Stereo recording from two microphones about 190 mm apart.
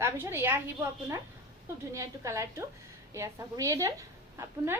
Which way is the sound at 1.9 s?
15° right (ahead or behind).